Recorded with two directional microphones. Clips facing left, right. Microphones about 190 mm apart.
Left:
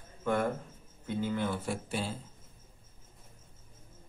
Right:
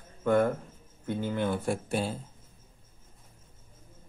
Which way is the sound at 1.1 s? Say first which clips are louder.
Right 3 dB; 55° right (ahead or behind).